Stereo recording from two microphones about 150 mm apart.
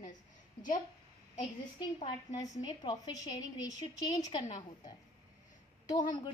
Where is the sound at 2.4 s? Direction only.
25° left (ahead or behind).